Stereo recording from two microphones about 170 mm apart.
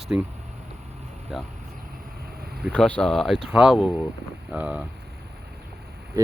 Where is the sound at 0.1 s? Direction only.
5° right (ahead or behind).